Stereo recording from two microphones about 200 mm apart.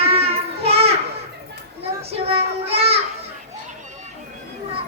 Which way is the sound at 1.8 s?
30° right (ahead or behind).